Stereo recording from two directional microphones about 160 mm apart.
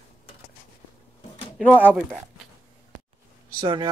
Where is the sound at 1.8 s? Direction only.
10° right (ahead or behind).